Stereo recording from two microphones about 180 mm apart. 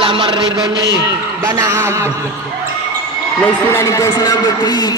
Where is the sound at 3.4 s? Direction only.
15° left (ahead or behind).